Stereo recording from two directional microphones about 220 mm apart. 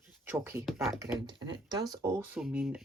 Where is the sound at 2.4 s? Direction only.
5° right (ahead or behind).